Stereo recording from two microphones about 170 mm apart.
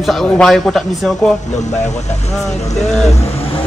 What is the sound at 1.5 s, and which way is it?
Speech, 40° left (ahead or behind).